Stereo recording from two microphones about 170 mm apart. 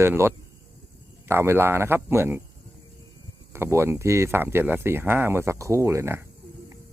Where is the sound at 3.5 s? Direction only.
15° right (ahead or behind).